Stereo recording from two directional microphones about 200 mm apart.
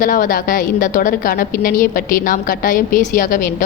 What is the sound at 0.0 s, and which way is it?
A woman's voice, 45° left (ahead or behind).